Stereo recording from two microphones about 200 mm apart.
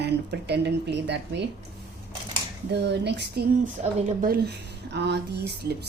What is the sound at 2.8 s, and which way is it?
Speech, 60° right (ahead or behind).